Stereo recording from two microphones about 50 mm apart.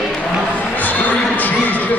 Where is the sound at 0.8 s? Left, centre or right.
Left.